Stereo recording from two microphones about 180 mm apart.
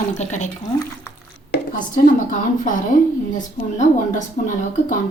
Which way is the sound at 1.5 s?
50° left (ahead or behind).